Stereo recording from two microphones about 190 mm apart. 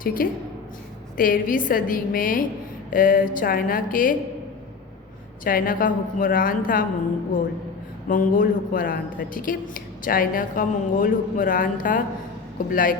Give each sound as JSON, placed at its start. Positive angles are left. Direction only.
{"t": 0.0, "sound": "a woman's voice", "side_deg": 50}
{"t": 5.4, "sound": "a woman's voice", "side_deg": 45}
{"t": 8.0, "sound": "a woman's voice", "side_deg": 45}